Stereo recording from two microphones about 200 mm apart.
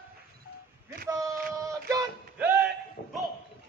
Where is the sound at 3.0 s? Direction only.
45° left (ahead or behind).